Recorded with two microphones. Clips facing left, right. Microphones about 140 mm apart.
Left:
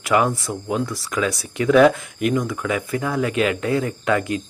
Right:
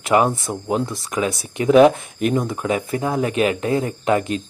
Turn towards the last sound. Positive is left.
turn(degrees=-25)  # may be behind; listen again after turning